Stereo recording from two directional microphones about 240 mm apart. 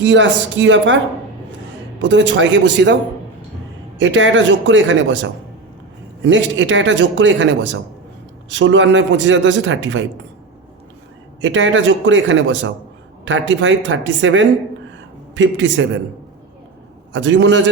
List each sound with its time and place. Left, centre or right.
0.0 s speech: right
2.0 s speech: right
11.3 s speech: right
17.1 s speech: right